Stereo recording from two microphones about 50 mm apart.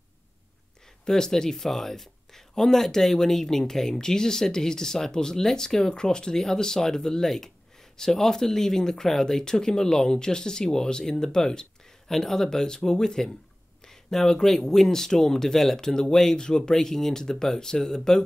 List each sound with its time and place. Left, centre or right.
1.0 s speech: centre